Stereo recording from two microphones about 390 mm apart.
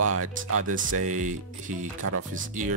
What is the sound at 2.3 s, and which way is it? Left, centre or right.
Speech, centre.